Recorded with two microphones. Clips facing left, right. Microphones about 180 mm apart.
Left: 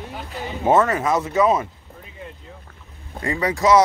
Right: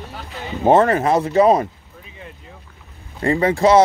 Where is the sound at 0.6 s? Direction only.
30° right (ahead or behind).